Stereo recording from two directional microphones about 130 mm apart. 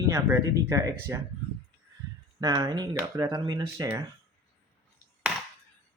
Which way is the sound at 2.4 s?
30° right (ahead or behind).